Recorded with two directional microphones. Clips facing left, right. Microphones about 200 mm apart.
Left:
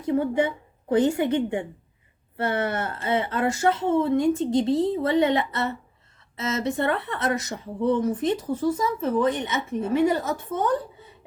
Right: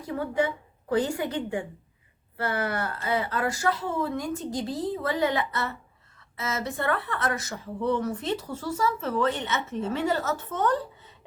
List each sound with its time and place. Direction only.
0.0 s a woman's voice: 20° left (ahead or behind)